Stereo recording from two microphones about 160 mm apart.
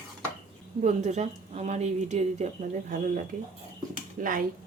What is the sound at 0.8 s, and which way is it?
A woman's voice, 45° right (ahead or behind).